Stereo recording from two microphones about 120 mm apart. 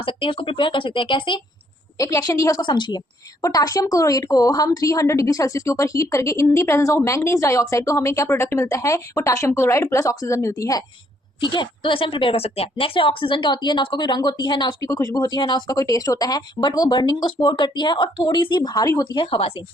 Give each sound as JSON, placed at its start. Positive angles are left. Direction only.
{"t": 0.0, "sound": "speech", "side_deg": 50}
{"t": 2.0, "sound": "speech", "side_deg": 30}
{"t": 2.6, "sound": "a woman's voice", "side_deg": 40}
{"t": 3.4, "sound": "speech", "side_deg": 30}
{"t": 11.3, "sound": "a woman's voice", "side_deg": 40}